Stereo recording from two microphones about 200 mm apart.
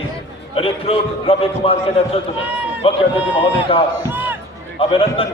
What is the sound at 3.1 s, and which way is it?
Speech, 10° right (ahead or behind).